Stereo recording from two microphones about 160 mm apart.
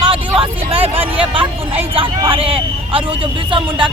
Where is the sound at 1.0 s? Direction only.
35° right (ahead or behind).